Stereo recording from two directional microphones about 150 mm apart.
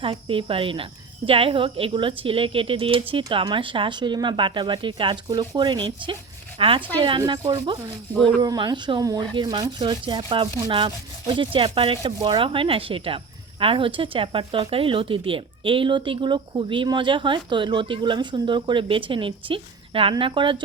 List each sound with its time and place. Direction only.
0.0 s speech: 35° right (ahead or behind)
7.3 s speech: 25° right (ahead or behind)